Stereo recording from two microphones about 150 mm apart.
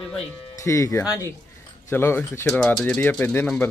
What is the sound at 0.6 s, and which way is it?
Speech, 20° left (ahead or behind).